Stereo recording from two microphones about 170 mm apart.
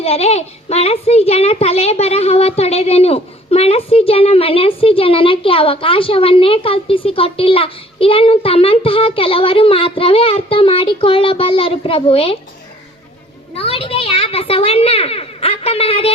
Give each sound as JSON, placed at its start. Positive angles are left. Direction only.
{"t": 0.0, "sound": "a child's voice", "side_deg": 35}
{"t": 13.5, "sound": "a child's voice", "side_deg": 35}